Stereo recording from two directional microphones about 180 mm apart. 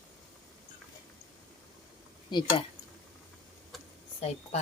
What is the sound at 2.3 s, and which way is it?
Speech, 30° left (ahead or behind).